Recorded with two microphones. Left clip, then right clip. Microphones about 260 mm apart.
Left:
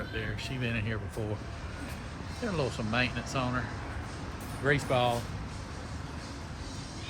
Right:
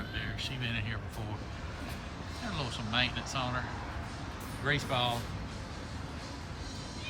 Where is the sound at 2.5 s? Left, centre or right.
Centre.